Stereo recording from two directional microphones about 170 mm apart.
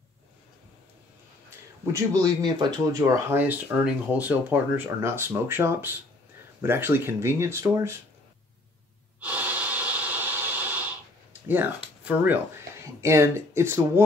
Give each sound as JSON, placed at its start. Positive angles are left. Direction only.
{"t": 1.9, "sound": "speech", "side_deg": -20}
{"t": 9.2, "sound": "breathing", "side_deg": -10}
{"t": 11.4, "sound": "speech", "side_deg": -10}